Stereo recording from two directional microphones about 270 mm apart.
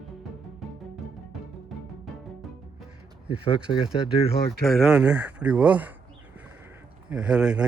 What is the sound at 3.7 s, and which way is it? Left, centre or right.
Speech, centre.